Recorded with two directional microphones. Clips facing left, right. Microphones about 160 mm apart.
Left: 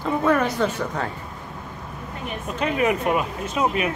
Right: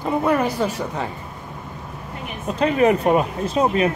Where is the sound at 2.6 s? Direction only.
35° right (ahead or behind).